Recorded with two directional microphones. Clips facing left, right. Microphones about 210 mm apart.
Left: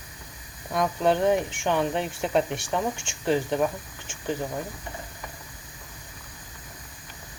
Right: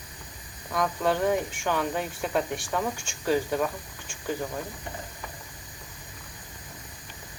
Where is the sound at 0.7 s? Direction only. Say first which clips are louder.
Left 3 dB; 20° left (ahead or behind).